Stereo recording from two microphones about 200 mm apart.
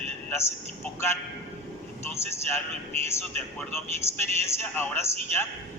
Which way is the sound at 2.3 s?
15° left (ahead or behind).